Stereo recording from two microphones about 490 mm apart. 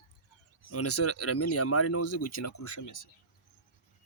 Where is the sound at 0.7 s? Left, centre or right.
Left.